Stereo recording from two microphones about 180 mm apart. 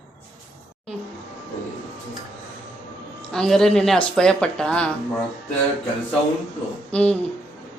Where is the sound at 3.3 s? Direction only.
5° left (ahead or behind).